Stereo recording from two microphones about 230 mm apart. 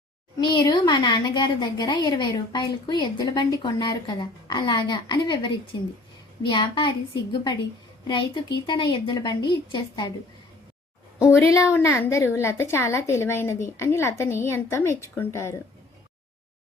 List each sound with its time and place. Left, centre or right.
0.3 s speech: centre
6.5 s speech: centre
8.6 s speech: centre
11.3 s a woman's voice: centre